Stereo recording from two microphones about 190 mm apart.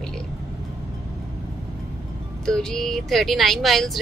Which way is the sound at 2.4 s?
5° left (ahead or behind).